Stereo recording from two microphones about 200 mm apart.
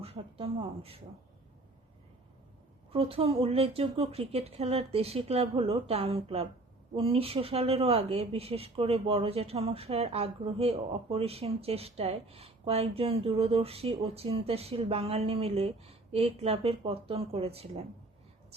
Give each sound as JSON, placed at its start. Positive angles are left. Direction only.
{"t": 0.0, "sound": "speech", "side_deg": -30}
{"t": 2.9, "sound": "speech", "side_deg": -30}